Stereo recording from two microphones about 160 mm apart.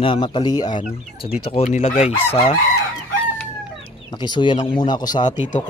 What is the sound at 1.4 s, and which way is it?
Speech, 40° left (ahead or behind).